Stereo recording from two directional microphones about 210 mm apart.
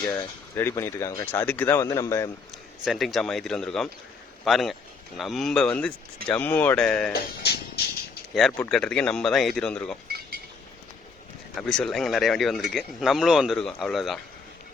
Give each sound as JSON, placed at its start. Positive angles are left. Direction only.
{"t": 0.0, "sound": "speech", "side_deg": 10}
{"t": 2.8, "sound": "speech", "side_deg": 0}
{"t": 7.1, "sound": "speech", "side_deg": 50}
{"t": 8.3, "sound": "speech", "side_deg": 0}
{"t": 10.1, "sound": "a sound", "side_deg": -45}
{"t": 11.5, "sound": "speech", "side_deg": 5}